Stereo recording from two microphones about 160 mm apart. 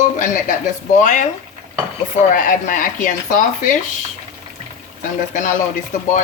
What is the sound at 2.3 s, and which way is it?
Speech, 55° left (ahead or behind).